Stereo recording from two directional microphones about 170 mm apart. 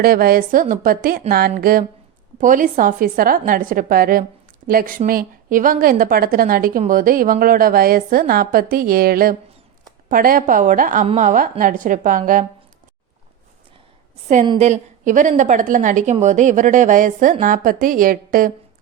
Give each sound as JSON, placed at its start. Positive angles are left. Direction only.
{"t": 0.0, "sound": "a woman's voice", "side_deg": -60}
{"t": 11.0, "sound": "a woman's voice", "side_deg": -35}
{"t": 11.3, "sound": "a woman's voice", "side_deg": -50}
{"t": 14.6, "sound": "a woman's voice", "side_deg": -45}